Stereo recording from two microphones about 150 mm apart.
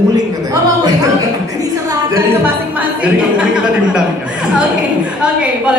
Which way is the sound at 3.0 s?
5° right (ahead or behind).